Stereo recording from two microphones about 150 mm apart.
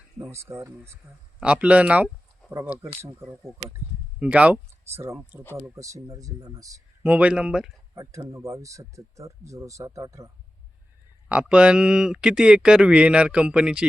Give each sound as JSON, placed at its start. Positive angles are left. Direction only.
{"t": 0.2, "sound": "speech", "side_deg": -20}
{"t": 7.0, "sound": "speech", "side_deg": -10}
{"t": 7.9, "sound": "speech", "side_deg": -20}
{"t": 11.3, "sound": "speech", "side_deg": -10}